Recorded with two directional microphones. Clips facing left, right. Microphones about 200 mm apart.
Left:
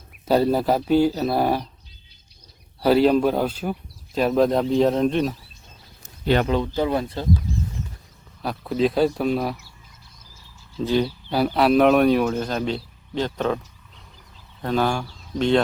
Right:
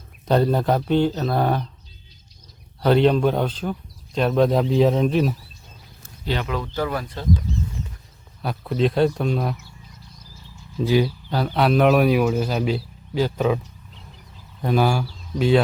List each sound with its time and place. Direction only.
0.3 s speech: 5° left (ahead or behind)
2.8 s speech: 5° left (ahead or behind)
6.2 s speech: 55° left (ahead or behind)
6.5 s speech: 25° left (ahead or behind)
8.4 s speech: centre (ahead or behind)
10.8 s speech: 10° right (ahead or behind)
11.3 s speech: 10° left (ahead or behind); by 13.6 s 5° right (ahead or behind)
14.6 s speech: 10° right (ahead or behind)